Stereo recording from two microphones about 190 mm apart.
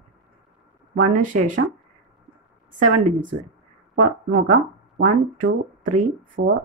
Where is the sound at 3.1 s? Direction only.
45° right (ahead or behind).